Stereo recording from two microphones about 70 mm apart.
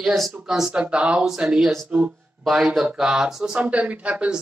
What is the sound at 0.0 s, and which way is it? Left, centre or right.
Speech, centre.